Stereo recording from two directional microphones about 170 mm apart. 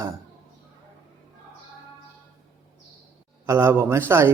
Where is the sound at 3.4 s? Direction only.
15° right (ahead or behind).